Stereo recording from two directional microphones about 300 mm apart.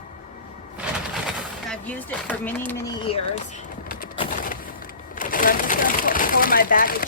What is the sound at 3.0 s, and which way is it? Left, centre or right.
Speech, centre.